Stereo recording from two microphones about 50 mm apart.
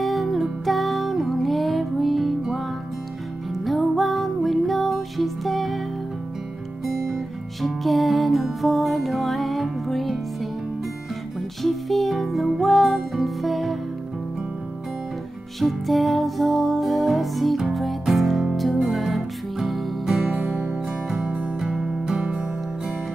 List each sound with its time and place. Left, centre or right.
0.0 s music: centre
3.6 s music: centre
7.6 s music: centre
11.6 s music: centre
15.6 s music: centre
20.1 s music: centre